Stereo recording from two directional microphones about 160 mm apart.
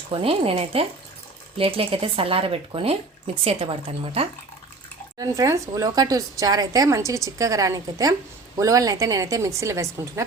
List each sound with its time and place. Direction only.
0.1 s speech: 35° right (ahead or behind)
5.1 s speech: 20° right (ahead or behind)